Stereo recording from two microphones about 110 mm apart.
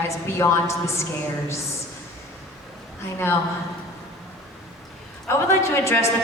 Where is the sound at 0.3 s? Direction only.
25° left (ahead or behind).